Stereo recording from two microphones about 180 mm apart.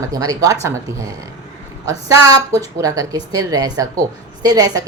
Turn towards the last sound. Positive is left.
turn(degrees=-20)  # may be behind; listen again after turning